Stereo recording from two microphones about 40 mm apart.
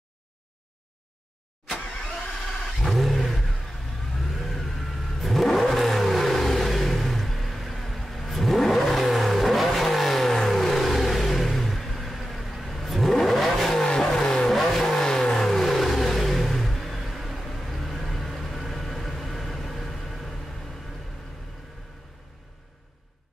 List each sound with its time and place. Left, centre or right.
2.8 s vehicle: centre
13.8 s vehicle: centre